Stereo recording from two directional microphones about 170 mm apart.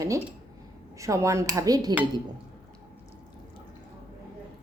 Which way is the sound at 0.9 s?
15° right (ahead or behind).